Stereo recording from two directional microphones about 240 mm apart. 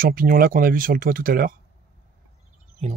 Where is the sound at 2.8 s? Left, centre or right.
Right.